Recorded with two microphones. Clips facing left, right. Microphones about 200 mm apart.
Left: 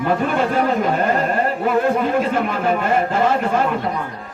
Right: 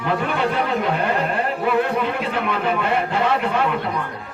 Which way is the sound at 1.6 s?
45° left (ahead or behind).